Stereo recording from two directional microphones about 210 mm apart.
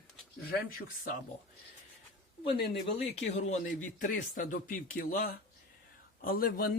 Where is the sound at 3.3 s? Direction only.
30° left (ahead or behind).